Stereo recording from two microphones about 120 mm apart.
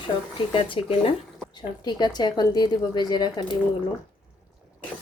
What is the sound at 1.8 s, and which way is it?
Speech, 35° left (ahead or behind).